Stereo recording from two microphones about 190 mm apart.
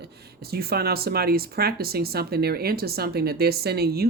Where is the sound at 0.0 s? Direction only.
55° right (ahead or behind).